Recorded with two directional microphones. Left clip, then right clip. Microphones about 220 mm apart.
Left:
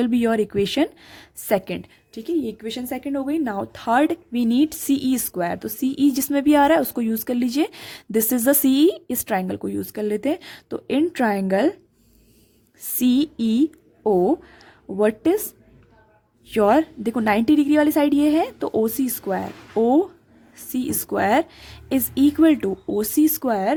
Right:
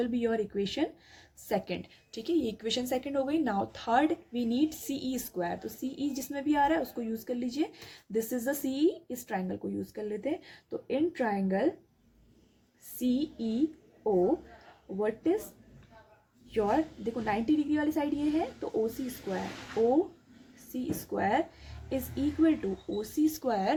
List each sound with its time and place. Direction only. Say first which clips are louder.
0.0 s a woman's voice: left 10 dB; 45° left (ahead or behind)
13.0 s a woman's voice: left 11 dB; 50° left (ahead or behind)
14.9 s a woman's voice: left 11 dB; 50° left (ahead or behind)
16.5 s a woman's voice: left 11 dB; 50° left (ahead or behind)
20.7 s a woman's voice: left 10 dB; 50° left (ahead or behind)